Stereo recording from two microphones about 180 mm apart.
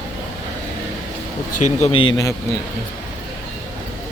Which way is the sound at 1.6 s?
35° left (ahead or behind).